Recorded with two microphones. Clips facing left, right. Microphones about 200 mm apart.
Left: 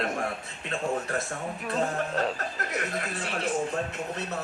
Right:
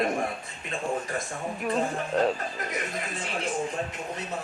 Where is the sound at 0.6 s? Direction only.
65° left (ahead or behind).